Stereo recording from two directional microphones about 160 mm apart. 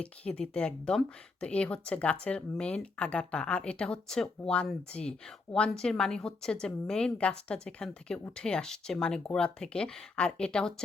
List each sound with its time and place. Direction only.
0.0 s speech: 5° left (ahead or behind)